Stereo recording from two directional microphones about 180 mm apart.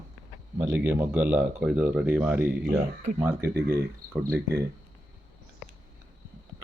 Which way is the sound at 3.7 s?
15° right (ahead or behind).